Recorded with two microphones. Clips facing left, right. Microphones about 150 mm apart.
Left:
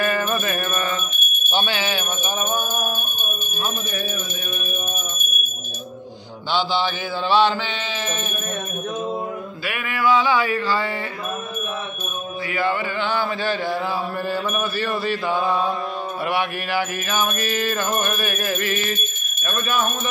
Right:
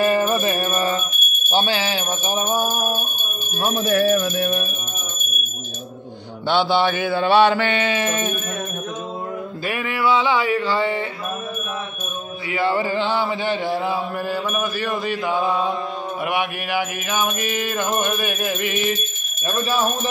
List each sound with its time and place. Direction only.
0.0 s music: 30° right (ahead or behind)
1.5 s a sound: 35° right (ahead or behind)
3.8 s speech: 90° right
6.5 s mantra: 60° right (ahead or behind)
9.7 s a man's voice: 25° right (ahead or behind)
12.4 s a man's voice: 25° right (ahead or behind)
14.2 s music: 10° right (ahead or behind)
19.4 s a sound: 30° right (ahead or behind)